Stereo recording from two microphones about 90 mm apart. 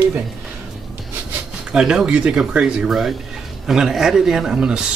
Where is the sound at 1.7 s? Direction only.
5° right (ahead or behind).